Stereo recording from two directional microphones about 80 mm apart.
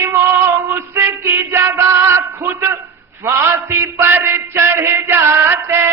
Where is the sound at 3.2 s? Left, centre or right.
Right.